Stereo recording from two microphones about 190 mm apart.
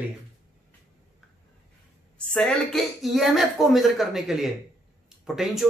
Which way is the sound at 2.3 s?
5° left (ahead or behind).